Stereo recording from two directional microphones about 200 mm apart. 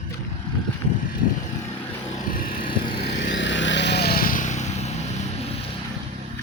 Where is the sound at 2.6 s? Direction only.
25° left (ahead or behind).